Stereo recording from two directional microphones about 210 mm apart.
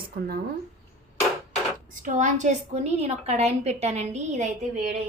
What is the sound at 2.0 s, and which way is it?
A woman's voice, 35° right (ahead or behind).